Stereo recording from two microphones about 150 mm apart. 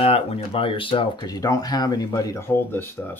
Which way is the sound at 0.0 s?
40° left (ahead or behind).